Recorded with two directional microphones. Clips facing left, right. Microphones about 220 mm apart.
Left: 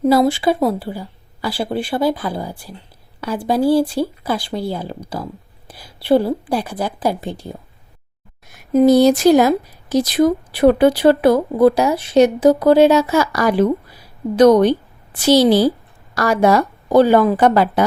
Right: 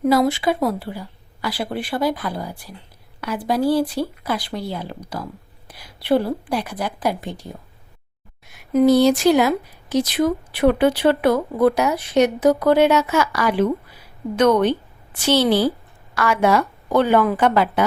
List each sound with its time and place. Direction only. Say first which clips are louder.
0.0 s speech: left 3 dB; 30° left (ahead or behind)
8.7 s speech: left 3 dB; 35° left (ahead or behind)